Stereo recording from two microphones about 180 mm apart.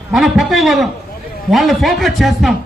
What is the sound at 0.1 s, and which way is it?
A man's voice, centre (ahead or behind).